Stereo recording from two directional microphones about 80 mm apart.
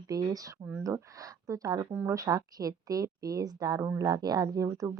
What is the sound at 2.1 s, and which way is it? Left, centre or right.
Speech, right.